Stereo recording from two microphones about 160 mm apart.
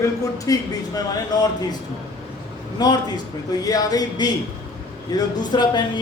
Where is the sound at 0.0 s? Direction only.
20° left (ahead or behind).